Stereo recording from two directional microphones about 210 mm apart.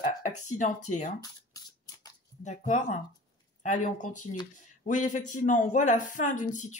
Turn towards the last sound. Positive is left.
turn(degrees=35)  # may be behind; listen again after turning